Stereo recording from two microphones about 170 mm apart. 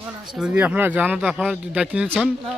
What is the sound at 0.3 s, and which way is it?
Speech, 5° right (ahead or behind).